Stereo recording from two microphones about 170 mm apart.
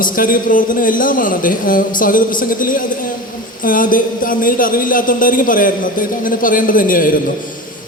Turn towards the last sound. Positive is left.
turn(degrees=55)  # may be behind; listen again after turning